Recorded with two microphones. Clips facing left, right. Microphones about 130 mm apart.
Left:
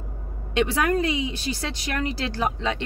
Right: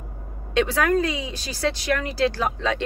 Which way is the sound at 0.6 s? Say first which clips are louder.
Right 2 dB; 20° left (ahead or behind).